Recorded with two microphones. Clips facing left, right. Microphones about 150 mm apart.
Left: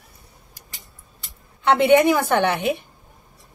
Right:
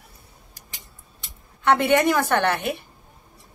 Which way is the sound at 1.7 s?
15° left (ahead or behind).